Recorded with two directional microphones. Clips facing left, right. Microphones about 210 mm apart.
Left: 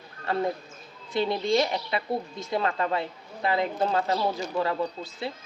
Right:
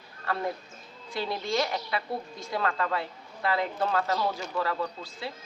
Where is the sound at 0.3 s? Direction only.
20° left (ahead or behind).